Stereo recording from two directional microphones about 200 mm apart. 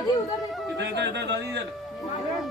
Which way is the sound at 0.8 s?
60° right (ahead or behind).